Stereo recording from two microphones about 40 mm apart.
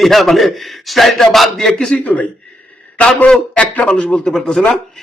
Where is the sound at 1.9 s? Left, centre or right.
Left.